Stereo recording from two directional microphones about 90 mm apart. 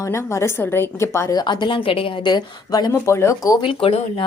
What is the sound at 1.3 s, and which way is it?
Speech, 55° left (ahead or behind).